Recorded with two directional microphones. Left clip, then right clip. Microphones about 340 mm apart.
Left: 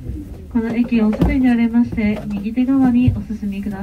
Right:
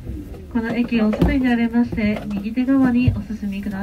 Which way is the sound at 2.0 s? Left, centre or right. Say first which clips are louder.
Left 1 dB; left.